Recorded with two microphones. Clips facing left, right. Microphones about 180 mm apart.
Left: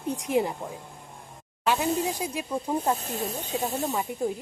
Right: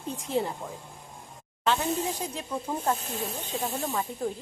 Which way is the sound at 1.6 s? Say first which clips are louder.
Left 2 dB; 10° left (ahead or behind).